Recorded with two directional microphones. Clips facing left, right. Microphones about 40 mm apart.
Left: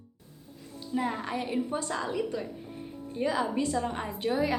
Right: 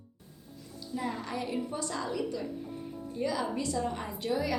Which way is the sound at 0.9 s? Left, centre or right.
Left.